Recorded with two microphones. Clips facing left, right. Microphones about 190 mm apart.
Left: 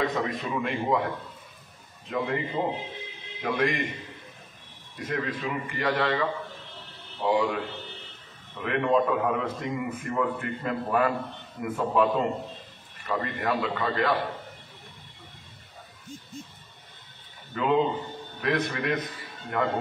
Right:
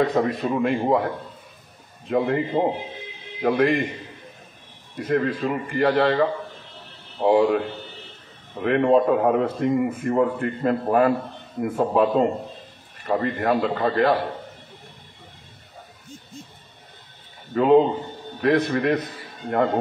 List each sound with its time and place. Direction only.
0.0 s a man's voice: 40° right (ahead or behind)
0.3 s a man's voice: 55° right (ahead or behind)
5.0 s a man's voice: 50° right (ahead or behind)
17.6 s a man's voice: 45° right (ahead or behind)